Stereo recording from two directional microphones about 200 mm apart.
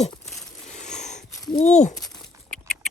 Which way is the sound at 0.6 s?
35° left (ahead or behind).